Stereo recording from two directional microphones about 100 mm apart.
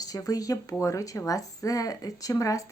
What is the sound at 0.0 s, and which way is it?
Speech, 35° left (ahead or behind).